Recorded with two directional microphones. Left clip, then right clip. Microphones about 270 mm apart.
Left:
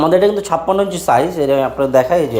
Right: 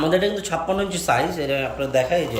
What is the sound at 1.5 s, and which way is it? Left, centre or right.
Speech, left.